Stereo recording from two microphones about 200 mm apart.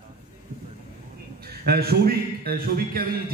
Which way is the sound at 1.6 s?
50° right (ahead or behind).